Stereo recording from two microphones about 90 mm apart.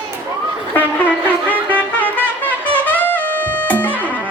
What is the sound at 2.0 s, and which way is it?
Music, 15° left (ahead or behind).